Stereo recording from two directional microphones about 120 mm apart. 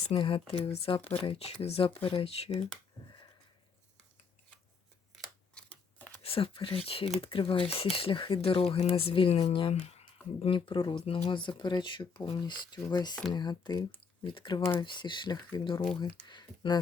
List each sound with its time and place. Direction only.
0.1 s speech: 50° left (ahead or behind)
5.1 s scissors: centre (ahead or behind)
5.6 s scissors: 10° left (ahead or behind)
6.2 s speech: 50° left (ahead or behind)
9.7 s speech: 70° left (ahead or behind); by 16.7 s 40° left (ahead or behind)